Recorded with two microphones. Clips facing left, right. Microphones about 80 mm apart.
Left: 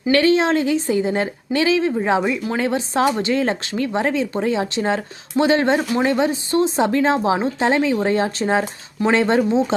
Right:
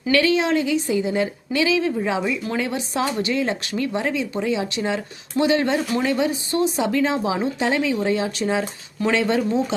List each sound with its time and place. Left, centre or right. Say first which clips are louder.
0.1 s speech: left 3 dB; left